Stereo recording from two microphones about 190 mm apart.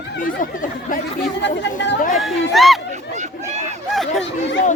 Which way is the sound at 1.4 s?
70° left (ahead or behind).